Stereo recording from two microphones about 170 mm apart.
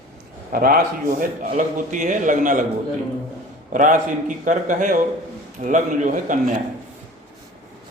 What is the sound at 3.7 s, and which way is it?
A man's voice, 50° right (ahead or behind).